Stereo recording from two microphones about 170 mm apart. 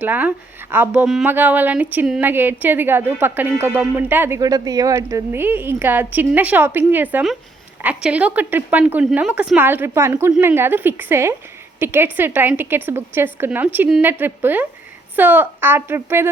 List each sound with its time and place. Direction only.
0.0 s a woman's voice: 10° right (ahead or behind)